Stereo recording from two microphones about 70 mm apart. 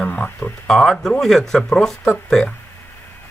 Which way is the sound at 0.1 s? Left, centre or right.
Left.